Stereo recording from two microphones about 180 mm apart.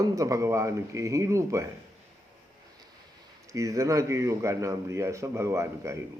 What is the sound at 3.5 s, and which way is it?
A man's voice, 20° right (ahead or behind).